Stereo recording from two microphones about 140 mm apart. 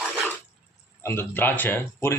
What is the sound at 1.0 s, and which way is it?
Speech, 15° left (ahead or behind).